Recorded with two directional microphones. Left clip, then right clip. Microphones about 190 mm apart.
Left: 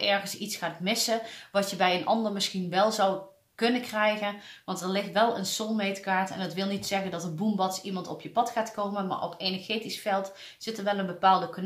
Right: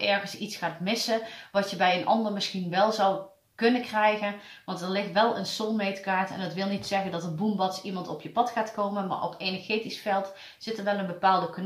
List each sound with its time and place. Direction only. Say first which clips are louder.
0.0 s speech: even; 45° left (ahead or behind)